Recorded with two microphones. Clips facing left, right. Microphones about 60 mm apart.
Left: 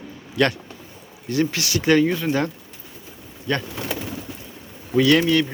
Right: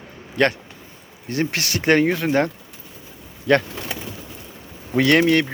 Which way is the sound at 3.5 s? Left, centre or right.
Right.